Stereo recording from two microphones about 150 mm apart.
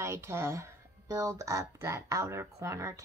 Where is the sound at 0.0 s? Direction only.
20° right (ahead or behind).